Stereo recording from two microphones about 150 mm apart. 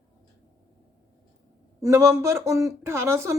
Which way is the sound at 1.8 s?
20° right (ahead or behind).